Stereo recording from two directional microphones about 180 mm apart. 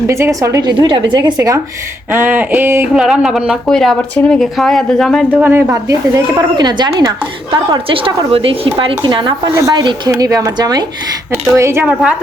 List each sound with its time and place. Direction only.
0.1 s speech: 15° right (ahead or behind); by 5.4 s centre (ahead or behind)
5.4 s speech: 15° right (ahead or behind)